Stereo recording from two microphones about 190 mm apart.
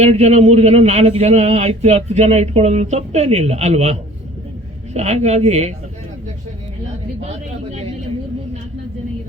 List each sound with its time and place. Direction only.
0.0 s speech: 35° right (ahead or behind)
4.9 s speech: 35° right (ahead or behind)